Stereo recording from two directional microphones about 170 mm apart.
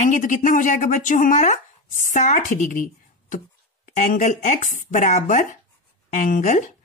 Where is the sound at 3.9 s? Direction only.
50° left (ahead or behind).